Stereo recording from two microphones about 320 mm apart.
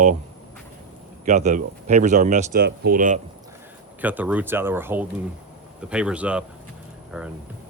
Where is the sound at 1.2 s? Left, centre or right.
Right.